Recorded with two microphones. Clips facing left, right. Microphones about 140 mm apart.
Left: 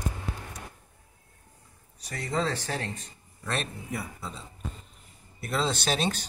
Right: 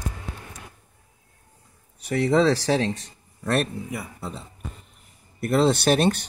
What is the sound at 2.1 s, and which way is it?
Speech, 75° right (ahead or behind).